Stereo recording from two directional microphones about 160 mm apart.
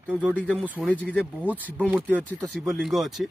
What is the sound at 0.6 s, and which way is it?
Speech, 5° right (ahead or behind).